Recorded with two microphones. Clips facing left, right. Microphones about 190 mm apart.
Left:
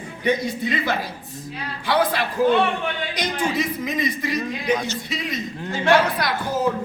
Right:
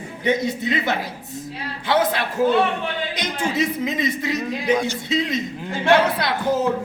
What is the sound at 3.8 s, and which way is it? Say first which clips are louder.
Speech: right 1 dB; 25° right (ahead or behind).